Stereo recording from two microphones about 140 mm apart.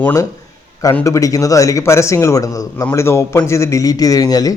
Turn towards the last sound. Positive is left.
turn(degrees=25)  # may be behind; listen again after turning